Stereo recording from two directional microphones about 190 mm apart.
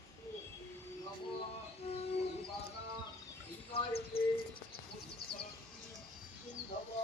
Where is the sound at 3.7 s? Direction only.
30° left (ahead or behind).